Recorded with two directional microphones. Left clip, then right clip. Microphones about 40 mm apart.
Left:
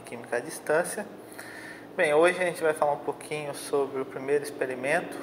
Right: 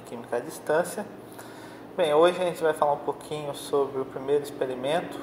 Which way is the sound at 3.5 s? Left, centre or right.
Left.